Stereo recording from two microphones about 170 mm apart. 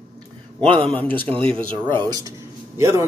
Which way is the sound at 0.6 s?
30° right (ahead or behind).